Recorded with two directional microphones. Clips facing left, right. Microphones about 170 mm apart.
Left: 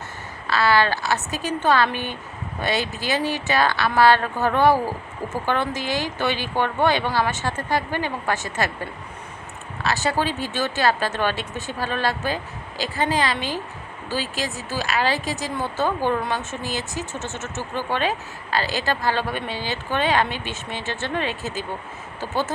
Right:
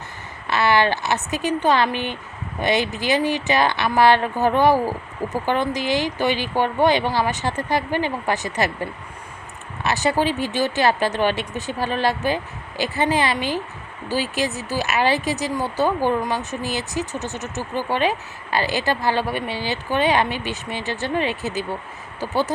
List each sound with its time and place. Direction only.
0.4 s a woman's voice: 20° right (ahead or behind)